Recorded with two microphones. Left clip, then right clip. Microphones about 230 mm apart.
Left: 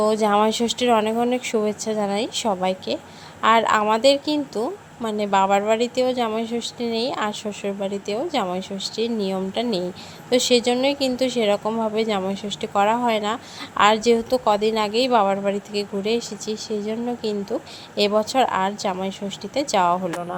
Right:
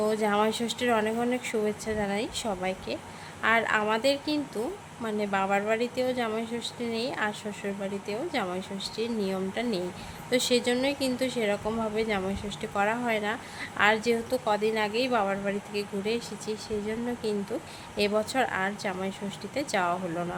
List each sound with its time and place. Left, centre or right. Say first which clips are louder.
0.0 s speech: left 7 dB; centre